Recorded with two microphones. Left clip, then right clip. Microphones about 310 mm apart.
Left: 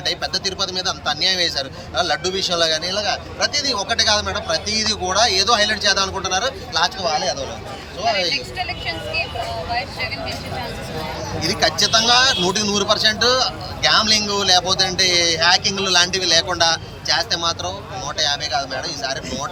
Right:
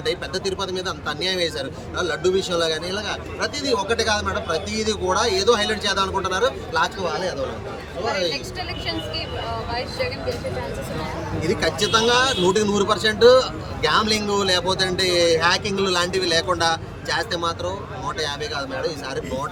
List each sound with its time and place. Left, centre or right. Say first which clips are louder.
0.1 s a man's voice: left 2 dB; centre
8.3 s speech: left 5 dB; centre
11.4 s a man's voice: left 4 dB; centre